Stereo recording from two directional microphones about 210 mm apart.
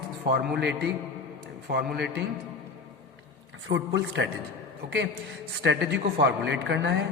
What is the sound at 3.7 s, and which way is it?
Speech, 60° right (ahead or behind).